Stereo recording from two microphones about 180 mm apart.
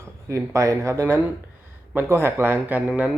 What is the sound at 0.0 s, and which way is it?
Speech, 15° right (ahead or behind).